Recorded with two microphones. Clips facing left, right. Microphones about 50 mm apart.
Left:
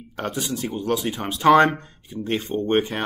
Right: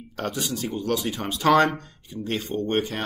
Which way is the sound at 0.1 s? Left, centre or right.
Centre.